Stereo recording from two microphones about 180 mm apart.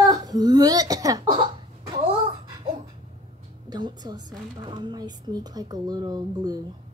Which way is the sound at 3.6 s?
25° right (ahead or behind).